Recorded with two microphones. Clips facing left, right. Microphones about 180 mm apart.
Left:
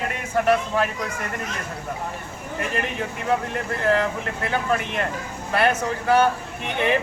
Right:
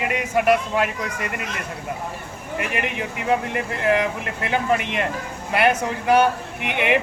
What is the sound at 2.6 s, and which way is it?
Speech, 15° right (ahead or behind).